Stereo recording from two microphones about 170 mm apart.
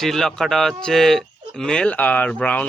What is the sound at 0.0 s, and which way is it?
Speech, centre (ahead or behind).